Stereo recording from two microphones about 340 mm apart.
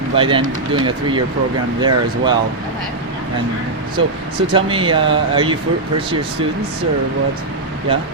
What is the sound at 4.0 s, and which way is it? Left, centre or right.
Speech, centre.